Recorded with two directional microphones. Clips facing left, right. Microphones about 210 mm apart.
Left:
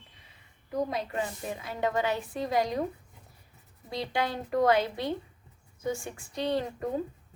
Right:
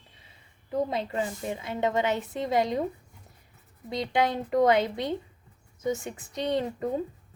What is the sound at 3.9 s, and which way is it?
Speech, 20° right (ahead or behind).